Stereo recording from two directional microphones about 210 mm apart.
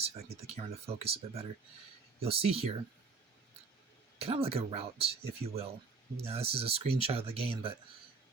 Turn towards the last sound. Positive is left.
turn(degrees=-25)  # may be behind; listen again after turning